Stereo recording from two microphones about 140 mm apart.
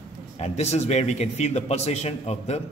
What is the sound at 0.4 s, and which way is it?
A man's voice, 50° left (ahead or behind).